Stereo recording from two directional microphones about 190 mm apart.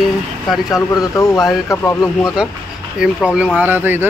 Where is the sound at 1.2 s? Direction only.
20° left (ahead or behind).